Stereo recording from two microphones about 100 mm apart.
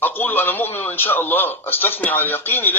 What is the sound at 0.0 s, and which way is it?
A man's voice, 20° left (ahead or behind).